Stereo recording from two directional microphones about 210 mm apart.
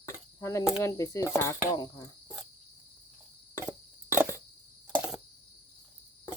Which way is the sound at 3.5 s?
10° right (ahead or behind).